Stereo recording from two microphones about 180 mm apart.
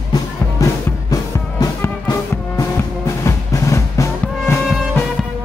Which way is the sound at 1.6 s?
20° left (ahead or behind).